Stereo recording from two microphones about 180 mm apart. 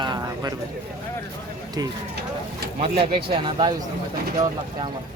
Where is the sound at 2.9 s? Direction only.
60° right (ahead or behind).